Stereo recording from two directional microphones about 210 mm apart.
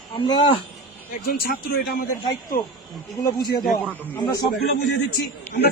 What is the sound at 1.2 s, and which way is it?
Speech, 45° left (ahead or behind).